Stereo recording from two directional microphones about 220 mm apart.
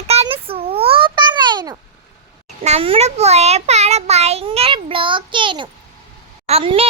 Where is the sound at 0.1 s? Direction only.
25° right (ahead or behind).